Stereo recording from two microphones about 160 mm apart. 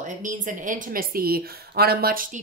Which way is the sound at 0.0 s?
55° right (ahead or behind).